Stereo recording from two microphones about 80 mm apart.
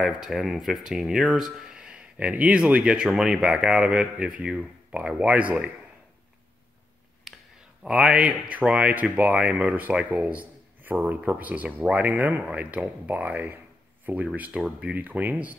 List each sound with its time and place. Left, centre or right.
0.0 s speech: centre
7.3 s a sound: centre
7.8 s speech: centre